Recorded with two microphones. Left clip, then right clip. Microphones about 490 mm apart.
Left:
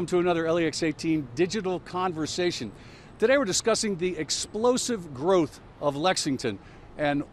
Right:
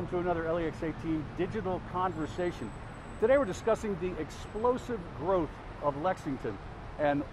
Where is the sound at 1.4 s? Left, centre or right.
Left.